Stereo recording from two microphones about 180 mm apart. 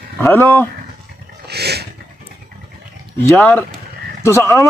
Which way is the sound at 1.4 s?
65° right (ahead or behind).